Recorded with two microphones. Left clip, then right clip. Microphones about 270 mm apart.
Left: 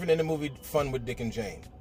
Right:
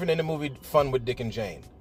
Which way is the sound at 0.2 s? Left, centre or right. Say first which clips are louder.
Right 1 dB; centre.